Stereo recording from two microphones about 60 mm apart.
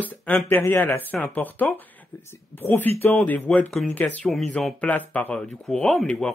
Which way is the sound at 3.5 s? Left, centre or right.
Centre.